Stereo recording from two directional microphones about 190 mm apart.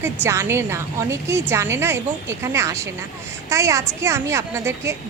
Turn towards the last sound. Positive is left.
turn(degrees=-15)  # may be behind; listen again after turning